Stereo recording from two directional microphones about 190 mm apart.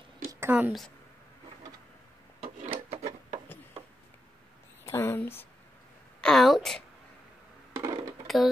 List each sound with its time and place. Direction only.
0.3 s a woman's voice: 10° right (ahead or behind)
2.4 s rub: 30° right (ahead or behind)
4.8 s speech: 10° left (ahead or behind)
6.2 s a sound: centre (ahead or behind)
7.7 s coin: 15° right (ahead or behind)